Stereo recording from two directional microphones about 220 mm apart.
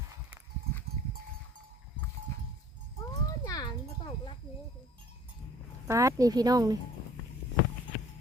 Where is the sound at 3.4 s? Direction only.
20° left (ahead or behind).